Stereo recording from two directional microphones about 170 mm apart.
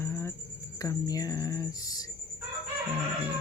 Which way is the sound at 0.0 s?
15° left (ahead or behind).